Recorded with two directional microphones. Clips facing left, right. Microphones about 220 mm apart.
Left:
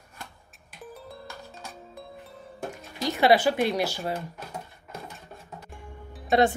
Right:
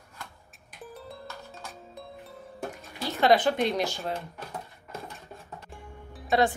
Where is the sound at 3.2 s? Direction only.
10° left (ahead or behind).